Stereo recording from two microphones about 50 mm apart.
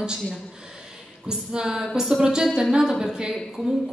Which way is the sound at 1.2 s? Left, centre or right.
Centre.